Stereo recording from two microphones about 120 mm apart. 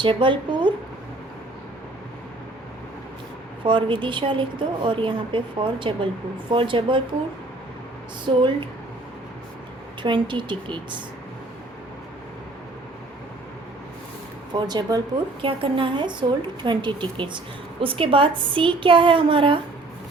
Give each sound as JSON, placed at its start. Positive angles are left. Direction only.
{"t": 0.0, "sound": "speech", "side_deg": -45}
{"t": 3.6, "sound": "a woman's voice", "side_deg": -45}
{"t": 10.0, "sound": "a woman's voice", "side_deg": -40}
{"t": 14.5, "sound": "a woman's voice", "side_deg": -35}
{"t": 15.4, "sound": "a woman's voice", "side_deg": -45}